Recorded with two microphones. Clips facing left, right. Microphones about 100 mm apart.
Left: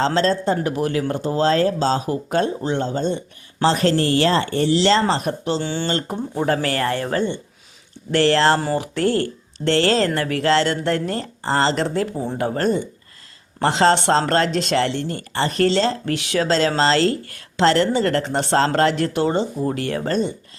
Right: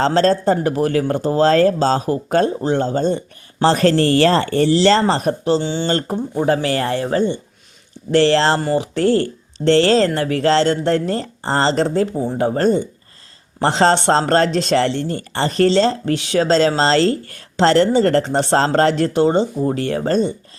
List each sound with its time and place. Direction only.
0.0 s speech: 45° right (ahead or behind)
5.6 s speech: 20° right (ahead or behind); by 20.3 s 35° right (ahead or behind)